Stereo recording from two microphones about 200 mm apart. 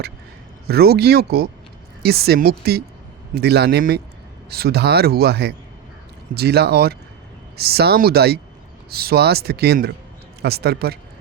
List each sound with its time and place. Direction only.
0.7 s a man's voice: 50° right (ahead or behind)